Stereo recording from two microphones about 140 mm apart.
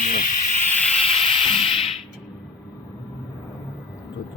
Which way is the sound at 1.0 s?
45° left (ahead or behind).